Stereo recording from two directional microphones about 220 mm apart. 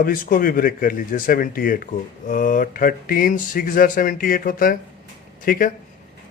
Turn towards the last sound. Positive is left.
turn(degrees=40)  # may be behind; listen again after turning